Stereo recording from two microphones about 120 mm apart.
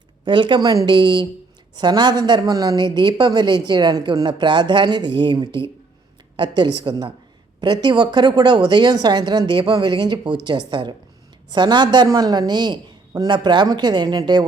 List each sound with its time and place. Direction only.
0.3 s a woman's voice: 40° right (ahead or behind)